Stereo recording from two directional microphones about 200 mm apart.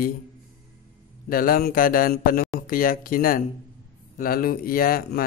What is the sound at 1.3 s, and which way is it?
A man's voice, 45° left (ahead or behind).